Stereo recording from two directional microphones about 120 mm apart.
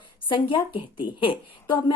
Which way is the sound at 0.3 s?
45° left (ahead or behind).